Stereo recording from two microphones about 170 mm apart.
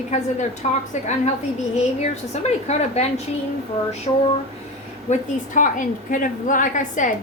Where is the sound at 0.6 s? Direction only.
45° left (ahead or behind).